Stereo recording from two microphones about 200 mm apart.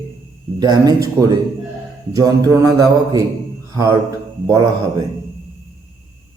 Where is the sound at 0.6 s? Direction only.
20° right (ahead or behind).